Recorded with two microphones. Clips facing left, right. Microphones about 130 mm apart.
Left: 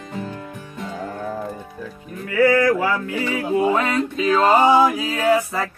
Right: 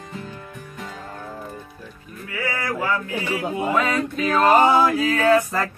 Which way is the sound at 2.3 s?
80° left.